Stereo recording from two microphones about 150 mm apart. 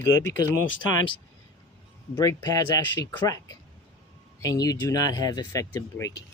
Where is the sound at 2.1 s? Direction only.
20° left (ahead or behind).